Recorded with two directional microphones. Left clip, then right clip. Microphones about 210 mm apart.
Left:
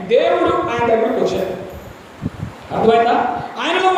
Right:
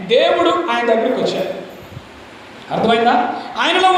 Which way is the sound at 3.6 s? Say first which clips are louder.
Right 3 dB; 25° right (ahead or behind).